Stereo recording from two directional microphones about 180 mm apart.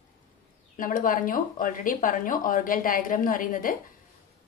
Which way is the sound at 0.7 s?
50° left (ahead or behind).